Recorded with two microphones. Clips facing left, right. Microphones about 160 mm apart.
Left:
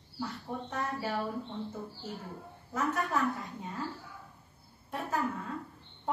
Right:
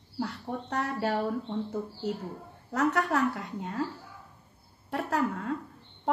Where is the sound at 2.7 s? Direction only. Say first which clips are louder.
Right 5 dB; 75° right (ahead or behind).